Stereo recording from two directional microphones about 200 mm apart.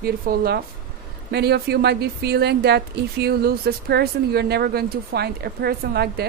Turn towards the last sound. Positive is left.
turn(degrees=-50)  # may be behind; listen again after turning